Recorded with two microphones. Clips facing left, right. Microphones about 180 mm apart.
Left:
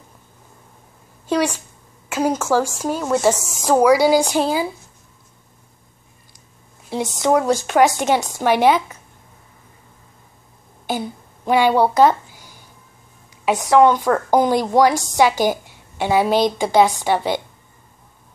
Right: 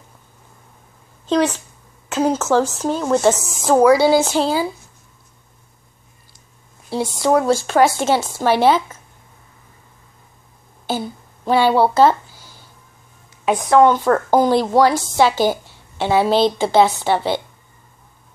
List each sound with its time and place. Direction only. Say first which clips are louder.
1.2 s a woman's voice: right 2 dB; 10° left (ahead or behind)
6.9 s speech: right 1 dB; 20° left (ahead or behind)
10.9 s a sound: right 1 dB; 15° left (ahead or behind)
13.5 s speech: right 1 dB; 15° left (ahead or behind)